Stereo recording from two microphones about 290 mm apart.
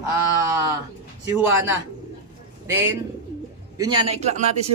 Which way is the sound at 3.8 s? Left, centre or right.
Centre.